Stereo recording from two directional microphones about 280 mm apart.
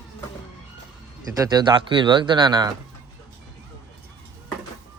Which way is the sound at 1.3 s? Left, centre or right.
Centre.